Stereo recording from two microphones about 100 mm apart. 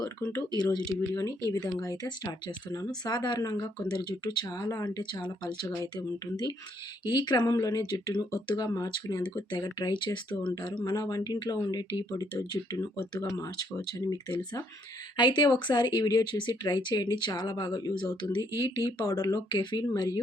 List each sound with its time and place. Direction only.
0.0 s speech: 35° left (ahead or behind)
7.1 s speech: 45° left (ahead or behind)
9.5 s speech: 45° left (ahead or behind)
15.1 s speech: 50° left (ahead or behind)